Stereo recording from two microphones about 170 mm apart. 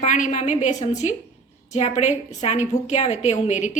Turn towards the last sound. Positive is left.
turn(degrees=45)  # may be behind; listen again after turning